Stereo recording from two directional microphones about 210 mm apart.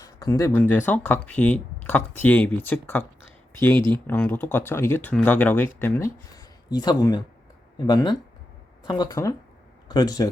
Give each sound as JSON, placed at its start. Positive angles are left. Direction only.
{"t": 0.0, "sound": "speech", "side_deg": 15}
{"t": 3.8, "sound": "speech", "side_deg": -20}
{"t": 4.0, "sound": "speech", "side_deg": 10}